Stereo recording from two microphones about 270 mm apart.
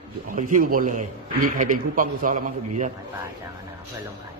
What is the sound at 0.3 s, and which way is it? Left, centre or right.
A man's voice, right.